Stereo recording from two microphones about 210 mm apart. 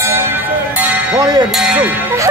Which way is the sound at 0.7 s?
5° right (ahead or behind).